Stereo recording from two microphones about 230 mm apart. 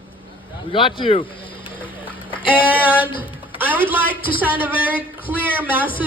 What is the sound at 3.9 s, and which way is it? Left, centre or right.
A woman's voice, centre.